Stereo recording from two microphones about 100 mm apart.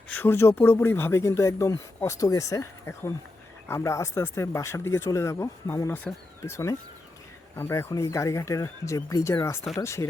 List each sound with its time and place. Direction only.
0.1 s speech: 20° left (ahead or behind)